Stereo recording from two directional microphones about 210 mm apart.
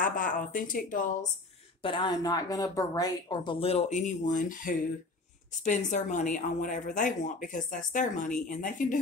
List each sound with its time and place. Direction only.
0.0 s a woman's voice: 40° left (ahead or behind)
1.8 s a woman's voice: 25° left (ahead or behind)